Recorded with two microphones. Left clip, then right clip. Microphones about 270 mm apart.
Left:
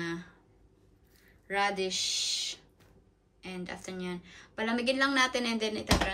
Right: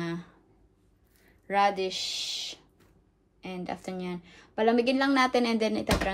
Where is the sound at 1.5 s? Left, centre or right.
Centre.